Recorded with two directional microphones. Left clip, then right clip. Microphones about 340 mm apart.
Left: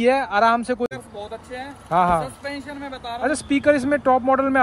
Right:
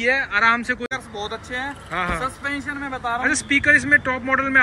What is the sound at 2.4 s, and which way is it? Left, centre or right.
Speech, centre.